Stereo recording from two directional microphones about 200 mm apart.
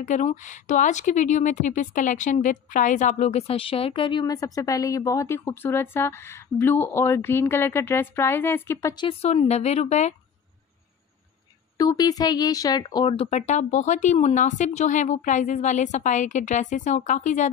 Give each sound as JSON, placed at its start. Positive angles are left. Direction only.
{"t": 0.0, "sound": "a woman's voice", "side_deg": 35}
{"t": 8.9, "sound": "speech", "side_deg": 30}
{"t": 11.8, "sound": "speech", "side_deg": 20}